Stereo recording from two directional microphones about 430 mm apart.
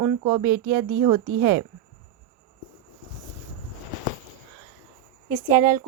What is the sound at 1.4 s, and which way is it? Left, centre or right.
Speech, centre.